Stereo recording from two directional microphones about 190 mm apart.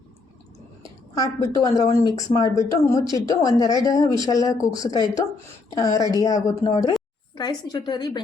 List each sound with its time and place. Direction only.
1.1 s a woman's voice: 20° left (ahead or behind)